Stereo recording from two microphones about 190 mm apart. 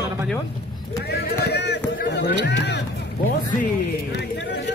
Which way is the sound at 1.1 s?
60° left (ahead or behind).